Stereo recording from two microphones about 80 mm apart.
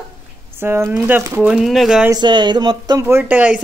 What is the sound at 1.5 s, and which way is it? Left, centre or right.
Speech, centre.